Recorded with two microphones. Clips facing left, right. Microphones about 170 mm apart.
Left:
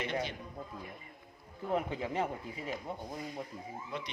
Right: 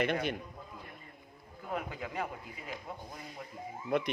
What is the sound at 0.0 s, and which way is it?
Speech, 55° right (ahead or behind).